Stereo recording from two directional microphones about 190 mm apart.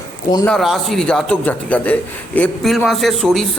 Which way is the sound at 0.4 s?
Centre (ahead or behind).